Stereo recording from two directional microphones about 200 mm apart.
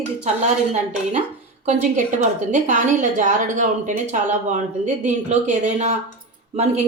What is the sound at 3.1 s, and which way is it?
A woman's voice, 40° right (ahead or behind).